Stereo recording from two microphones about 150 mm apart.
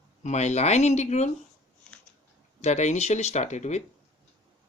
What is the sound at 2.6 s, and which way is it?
Speech, 50° left (ahead or behind).